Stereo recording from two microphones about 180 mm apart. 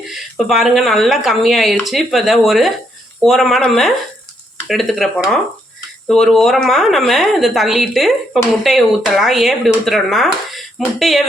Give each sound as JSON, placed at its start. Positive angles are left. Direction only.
{"t": 0.1, "sound": "speech", "side_deg": 0}